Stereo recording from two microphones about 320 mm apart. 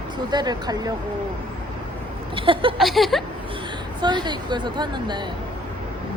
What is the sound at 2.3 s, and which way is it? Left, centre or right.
Speech, centre.